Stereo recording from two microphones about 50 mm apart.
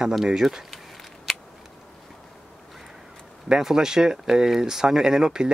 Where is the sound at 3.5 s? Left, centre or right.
Centre.